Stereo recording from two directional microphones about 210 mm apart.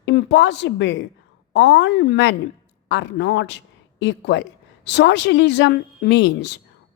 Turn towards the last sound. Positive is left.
turn(degrees=55)  # may be behind; listen again after turning